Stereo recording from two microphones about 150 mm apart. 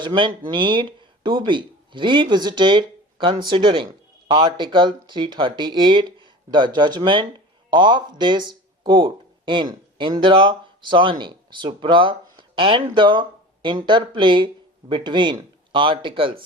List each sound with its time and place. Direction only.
0.0 s speech: 30° right (ahead or behind)